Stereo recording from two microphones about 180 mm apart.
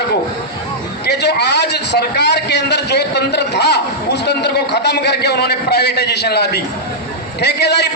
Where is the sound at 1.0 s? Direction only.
65° left (ahead or behind).